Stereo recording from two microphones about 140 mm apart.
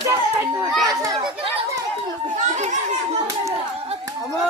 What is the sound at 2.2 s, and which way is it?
Children playing, 60° right (ahead or behind).